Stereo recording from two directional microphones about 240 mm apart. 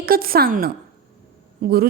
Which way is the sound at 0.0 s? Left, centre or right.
Right.